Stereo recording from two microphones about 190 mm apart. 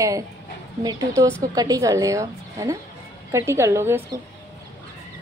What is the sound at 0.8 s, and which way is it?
A woman's voice, 20° right (ahead or behind).